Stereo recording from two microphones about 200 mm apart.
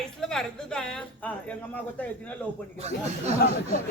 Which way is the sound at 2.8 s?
35° right (ahead or behind).